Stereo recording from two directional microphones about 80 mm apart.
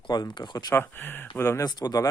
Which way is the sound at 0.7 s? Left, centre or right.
Left.